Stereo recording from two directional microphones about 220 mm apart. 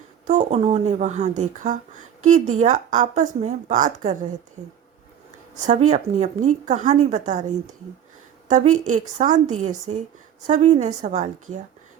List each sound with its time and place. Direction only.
0.3 s a woman's voice: 30° right (ahead or behind)
5.5 s a woman's voice: 30° right (ahead or behind)